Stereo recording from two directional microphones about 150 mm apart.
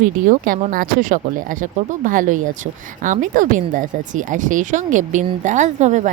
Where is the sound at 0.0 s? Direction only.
65° right (ahead or behind).